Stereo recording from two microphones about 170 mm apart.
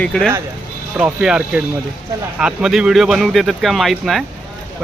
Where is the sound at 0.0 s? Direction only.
5° left (ahead or behind).